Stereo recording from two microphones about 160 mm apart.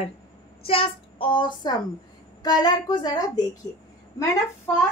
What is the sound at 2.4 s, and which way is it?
A woman's voice, 25° left (ahead or behind).